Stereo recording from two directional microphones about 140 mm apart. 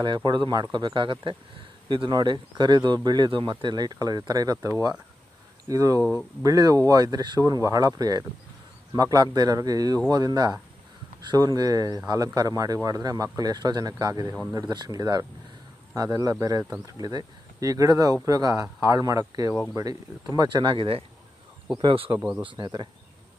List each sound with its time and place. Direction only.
0.0 s speech: 35° right (ahead or behind)